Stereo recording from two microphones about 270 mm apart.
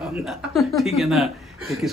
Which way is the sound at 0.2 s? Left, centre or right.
Centre.